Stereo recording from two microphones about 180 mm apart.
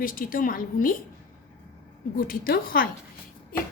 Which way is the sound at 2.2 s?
55° left (ahead or behind).